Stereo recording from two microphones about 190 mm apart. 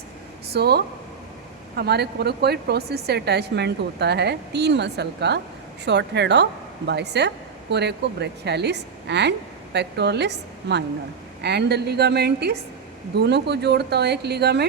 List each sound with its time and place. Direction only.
0.5 s speech: 60° right (ahead or behind)